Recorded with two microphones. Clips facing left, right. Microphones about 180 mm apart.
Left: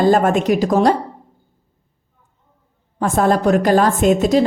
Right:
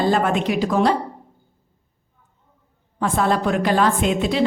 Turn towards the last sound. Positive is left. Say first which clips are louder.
# left 6 dB
turn(degrees=45)  # may be behind; listen again after turning